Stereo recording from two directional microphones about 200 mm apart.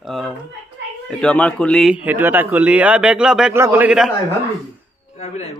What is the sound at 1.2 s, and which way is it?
A man's voice, 5° left (ahead or behind).